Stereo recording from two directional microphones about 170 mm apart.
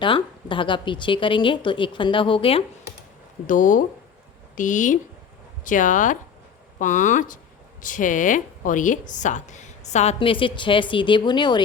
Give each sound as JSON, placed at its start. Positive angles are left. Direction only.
{"t": 0.0, "sound": "a woman's voice", "side_deg": 30}
{"t": 3.4, "sound": "a woman's voice", "side_deg": 50}